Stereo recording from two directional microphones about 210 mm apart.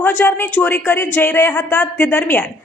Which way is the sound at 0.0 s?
10° left (ahead or behind).